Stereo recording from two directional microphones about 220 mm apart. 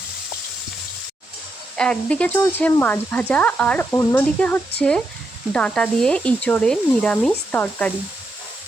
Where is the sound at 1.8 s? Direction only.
5° left (ahead or behind).